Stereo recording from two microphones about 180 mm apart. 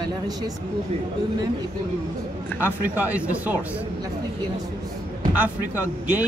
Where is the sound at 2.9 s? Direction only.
10° right (ahead or behind).